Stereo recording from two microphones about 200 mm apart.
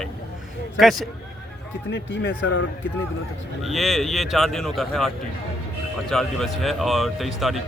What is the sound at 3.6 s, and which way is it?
Speech, centre (ahead or behind).